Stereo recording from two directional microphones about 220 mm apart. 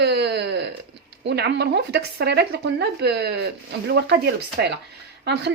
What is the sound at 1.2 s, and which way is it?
A woman's voice, 50° right (ahead or behind).